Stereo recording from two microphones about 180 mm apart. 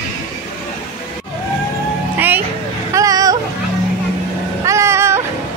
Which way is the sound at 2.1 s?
10° right (ahead or behind).